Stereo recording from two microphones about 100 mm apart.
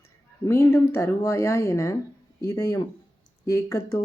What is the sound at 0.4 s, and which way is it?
A woman's voice, 25° left (ahead or behind).